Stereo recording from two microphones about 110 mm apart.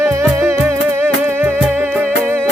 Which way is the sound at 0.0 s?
25° right (ahead or behind).